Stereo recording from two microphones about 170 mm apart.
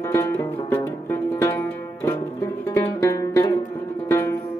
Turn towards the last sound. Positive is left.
turn(degrees=15)  # may be behind; listen again after turning